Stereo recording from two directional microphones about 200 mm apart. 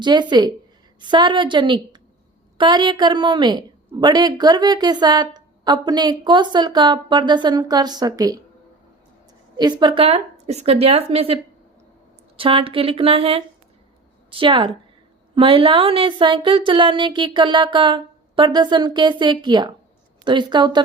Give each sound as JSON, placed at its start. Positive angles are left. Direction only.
{"t": 0.0, "sound": "a woman's voice", "side_deg": -20}
{"t": 9.6, "sound": "a woman's voice", "side_deg": -20}
{"t": 12.4, "sound": "a woman's voice", "side_deg": -25}